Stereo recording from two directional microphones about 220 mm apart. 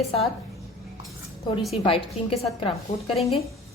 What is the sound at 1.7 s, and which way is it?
A woman's voice, 25° left (ahead or behind).